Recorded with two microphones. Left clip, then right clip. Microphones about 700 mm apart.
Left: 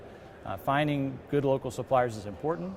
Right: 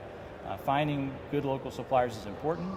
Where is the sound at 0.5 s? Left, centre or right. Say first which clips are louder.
Left 1 dB; left.